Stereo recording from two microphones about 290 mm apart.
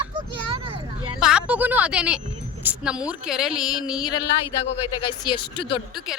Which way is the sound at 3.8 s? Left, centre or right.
Centre.